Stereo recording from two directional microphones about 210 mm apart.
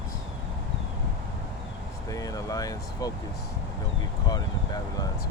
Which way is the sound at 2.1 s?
15° left (ahead or behind).